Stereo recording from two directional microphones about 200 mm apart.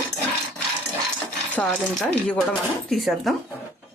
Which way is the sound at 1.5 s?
5° left (ahead or behind).